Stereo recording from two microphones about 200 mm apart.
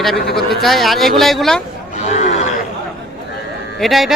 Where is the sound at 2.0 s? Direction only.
35° left (ahead or behind).